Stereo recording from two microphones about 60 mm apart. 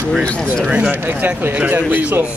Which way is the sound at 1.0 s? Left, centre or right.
Right.